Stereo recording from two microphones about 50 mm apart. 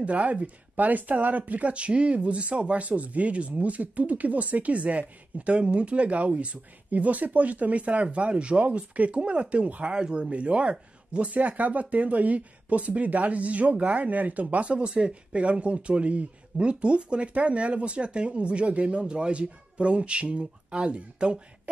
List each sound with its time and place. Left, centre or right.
0.0 s speech: right
9.9 s speech: centre